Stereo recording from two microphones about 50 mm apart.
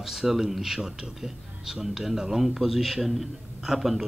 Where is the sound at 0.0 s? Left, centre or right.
Centre.